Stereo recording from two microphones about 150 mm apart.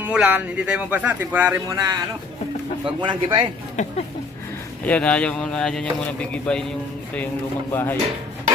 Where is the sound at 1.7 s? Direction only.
25° right (ahead or behind).